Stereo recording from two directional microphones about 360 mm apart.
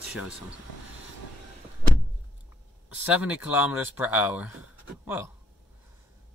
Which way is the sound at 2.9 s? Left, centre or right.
Centre.